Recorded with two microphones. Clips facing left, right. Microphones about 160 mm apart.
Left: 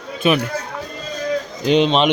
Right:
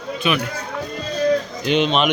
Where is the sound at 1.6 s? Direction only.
35° left (ahead or behind).